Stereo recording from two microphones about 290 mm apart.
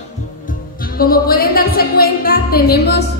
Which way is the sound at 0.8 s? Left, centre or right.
Left.